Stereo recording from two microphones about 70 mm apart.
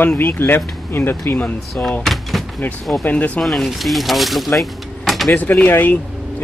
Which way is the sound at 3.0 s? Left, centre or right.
Centre.